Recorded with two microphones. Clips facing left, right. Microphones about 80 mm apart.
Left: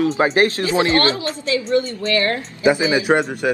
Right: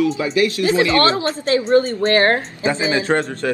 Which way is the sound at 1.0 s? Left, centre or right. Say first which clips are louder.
Right 3 dB; right.